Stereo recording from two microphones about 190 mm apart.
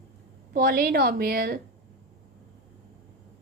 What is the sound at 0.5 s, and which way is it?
A woman's voice, 50° right (ahead or behind).